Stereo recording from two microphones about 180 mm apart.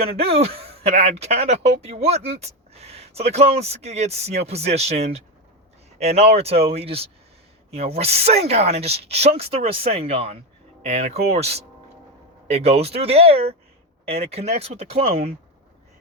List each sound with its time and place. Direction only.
0.0 s speech: 30° right (ahead or behind)